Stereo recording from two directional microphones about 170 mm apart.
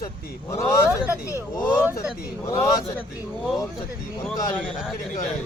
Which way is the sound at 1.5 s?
15° left (ahead or behind).